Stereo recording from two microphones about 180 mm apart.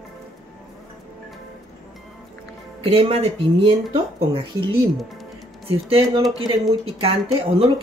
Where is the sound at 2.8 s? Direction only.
30° right (ahead or behind).